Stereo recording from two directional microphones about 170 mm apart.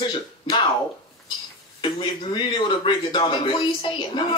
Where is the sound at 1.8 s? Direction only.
30° left (ahead or behind).